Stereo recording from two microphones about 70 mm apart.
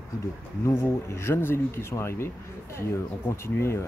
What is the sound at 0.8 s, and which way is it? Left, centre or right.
Speech, left.